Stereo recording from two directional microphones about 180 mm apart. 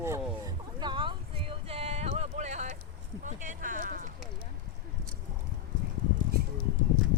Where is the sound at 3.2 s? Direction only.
45° right (ahead or behind).